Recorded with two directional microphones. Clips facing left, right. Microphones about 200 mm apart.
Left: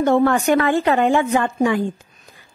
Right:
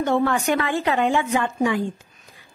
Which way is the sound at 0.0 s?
50° left (ahead or behind).